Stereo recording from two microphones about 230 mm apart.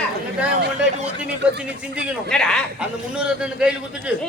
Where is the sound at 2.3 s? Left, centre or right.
Centre.